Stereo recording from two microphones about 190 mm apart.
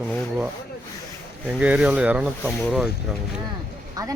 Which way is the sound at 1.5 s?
5° right (ahead or behind).